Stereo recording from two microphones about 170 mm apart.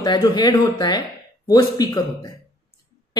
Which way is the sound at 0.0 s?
25° left (ahead or behind).